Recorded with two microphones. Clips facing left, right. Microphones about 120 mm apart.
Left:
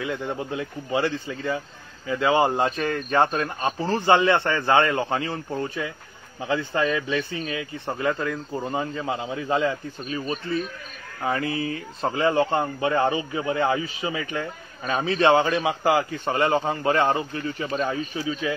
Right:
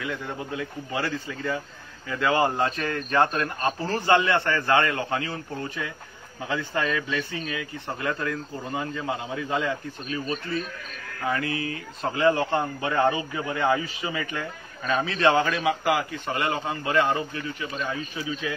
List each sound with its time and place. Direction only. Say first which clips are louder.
0.0 s speech: left 4 dB; 25° left (ahead or behind)
11.2 s a man's voice: left 2 dB; 25° left (ahead or behind)